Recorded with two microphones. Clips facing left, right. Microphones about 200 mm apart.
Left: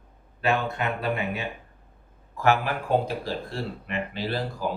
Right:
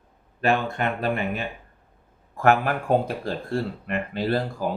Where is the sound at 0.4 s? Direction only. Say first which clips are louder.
Right 2 dB; 50° right (ahead or behind).